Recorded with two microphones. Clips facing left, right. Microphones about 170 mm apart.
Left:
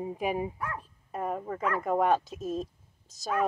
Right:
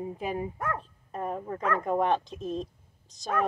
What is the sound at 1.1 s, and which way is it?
Speech, 5° left (ahead or behind).